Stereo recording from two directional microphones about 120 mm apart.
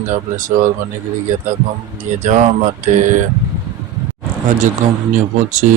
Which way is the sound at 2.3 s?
90° right.